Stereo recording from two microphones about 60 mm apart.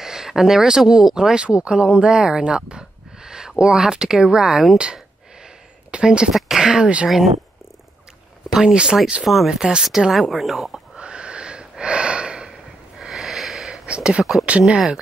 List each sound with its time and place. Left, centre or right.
0.0 s speech: centre
7.1 s speech: centre
8.5 s speech: centre
9.2 s speech: centre
9.5 s speech: centre
11.0 s gasp: centre
13.0 s sniff: centre
13.8 s speech: centre